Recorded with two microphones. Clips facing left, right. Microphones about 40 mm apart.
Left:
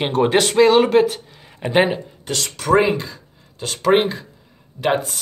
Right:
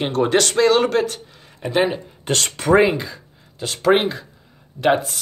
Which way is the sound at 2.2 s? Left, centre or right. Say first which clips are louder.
Right 8 dB; right.